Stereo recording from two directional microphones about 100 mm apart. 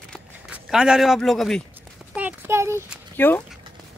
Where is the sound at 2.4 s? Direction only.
25° right (ahead or behind).